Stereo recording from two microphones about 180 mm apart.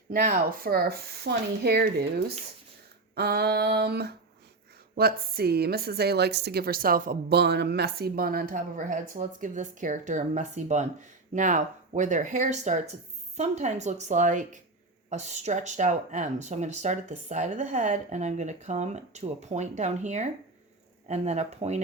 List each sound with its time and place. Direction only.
0.1 s a woman's voice: 45° right (ahead or behind)